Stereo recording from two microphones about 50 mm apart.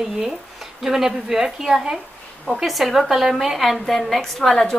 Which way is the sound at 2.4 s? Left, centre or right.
Centre.